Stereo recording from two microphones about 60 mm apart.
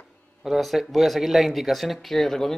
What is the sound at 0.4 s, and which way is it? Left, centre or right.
Speech, centre.